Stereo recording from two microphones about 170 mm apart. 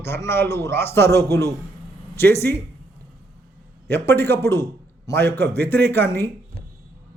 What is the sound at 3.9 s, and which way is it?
Speech, 15° left (ahead or behind).